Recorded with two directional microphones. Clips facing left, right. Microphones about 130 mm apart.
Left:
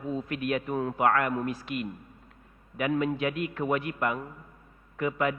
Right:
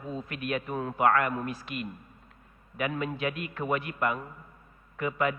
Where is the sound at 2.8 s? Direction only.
25° left (ahead or behind).